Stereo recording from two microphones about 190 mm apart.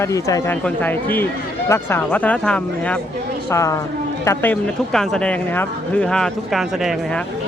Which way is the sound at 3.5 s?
15° left (ahead or behind).